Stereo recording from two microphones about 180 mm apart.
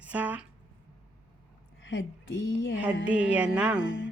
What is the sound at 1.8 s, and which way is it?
Speech, 90° left.